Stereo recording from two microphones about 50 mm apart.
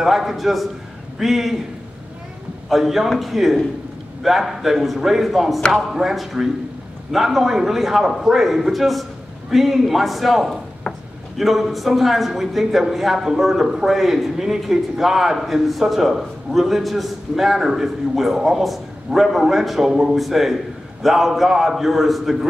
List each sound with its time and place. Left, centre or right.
0.0 s speech: centre
2.7 s speech: centre